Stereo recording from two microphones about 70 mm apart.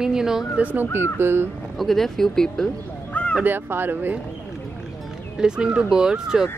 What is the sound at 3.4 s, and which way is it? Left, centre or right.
Speech, right.